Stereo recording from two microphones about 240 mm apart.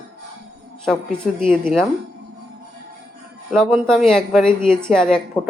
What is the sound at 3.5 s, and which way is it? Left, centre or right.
A woman's voice, centre.